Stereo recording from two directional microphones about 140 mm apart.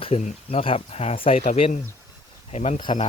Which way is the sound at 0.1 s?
45° left (ahead or behind).